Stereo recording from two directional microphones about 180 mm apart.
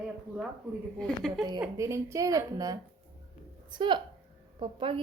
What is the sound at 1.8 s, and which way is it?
A woman's voice, 15° right (ahead or behind).